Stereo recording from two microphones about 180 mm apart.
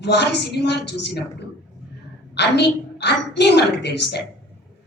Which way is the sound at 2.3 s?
70° left (ahead or behind).